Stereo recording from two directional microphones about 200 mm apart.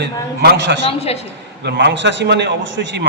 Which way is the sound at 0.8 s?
30° left (ahead or behind).